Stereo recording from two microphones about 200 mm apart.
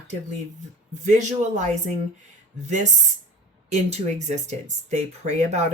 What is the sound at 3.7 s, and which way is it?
Speech, 35° right (ahead or behind).